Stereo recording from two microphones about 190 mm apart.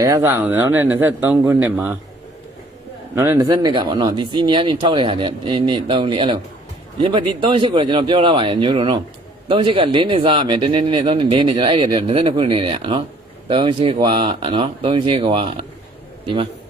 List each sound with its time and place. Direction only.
0.0 s speech: 15° right (ahead or behind)
3.2 s a man's voice: 15° right (ahead or behind)